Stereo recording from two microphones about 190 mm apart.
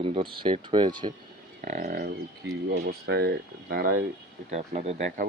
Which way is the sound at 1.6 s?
45° right (ahead or behind).